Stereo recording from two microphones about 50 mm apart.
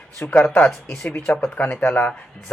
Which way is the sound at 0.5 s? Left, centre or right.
Left.